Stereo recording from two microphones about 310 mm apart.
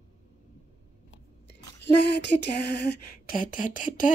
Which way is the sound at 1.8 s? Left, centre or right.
Left.